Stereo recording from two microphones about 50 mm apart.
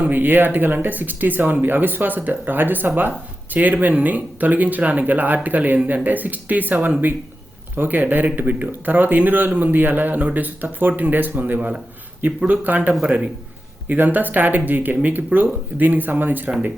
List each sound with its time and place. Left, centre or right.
0.0 s a man's voice: right